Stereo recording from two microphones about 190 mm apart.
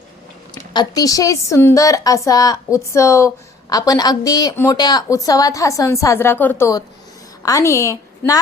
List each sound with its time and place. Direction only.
0.5 s a woman's voice: 20° left (ahead or behind)